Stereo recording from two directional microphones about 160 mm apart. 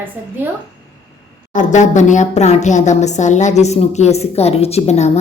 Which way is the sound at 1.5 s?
50° left (ahead or behind).